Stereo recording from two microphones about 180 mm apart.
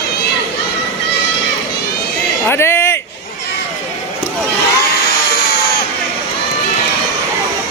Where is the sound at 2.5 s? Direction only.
15° left (ahead or behind).